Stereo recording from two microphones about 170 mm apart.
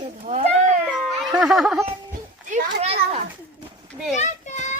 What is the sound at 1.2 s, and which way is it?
Speech, centre (ahead or behind).